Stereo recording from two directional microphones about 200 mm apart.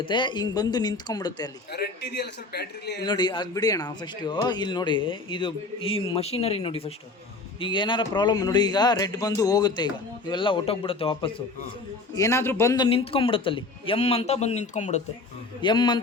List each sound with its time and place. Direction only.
0.0 s speech: 25° left (ahead or behind)
1.7 s a man's voice: 55° left (ahead or behind)
3.0 s speech: 20° left (ahead or behind)
12.1 s speech: 15° left (ahead or behind); by 15.0 s 35° left (ahead or behind)
15.6 s speech: 25° left (ahead or behind)